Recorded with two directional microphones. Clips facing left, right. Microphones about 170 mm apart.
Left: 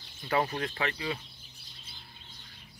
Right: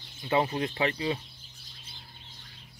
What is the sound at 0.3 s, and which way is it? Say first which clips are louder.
Speech: right 3 dB; 25° right (ahead or behind).